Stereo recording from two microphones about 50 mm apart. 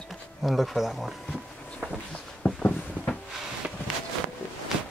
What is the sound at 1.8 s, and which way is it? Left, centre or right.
Walk, right.